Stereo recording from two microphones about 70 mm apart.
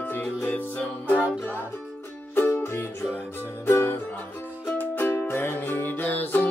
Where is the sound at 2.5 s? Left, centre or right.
Left.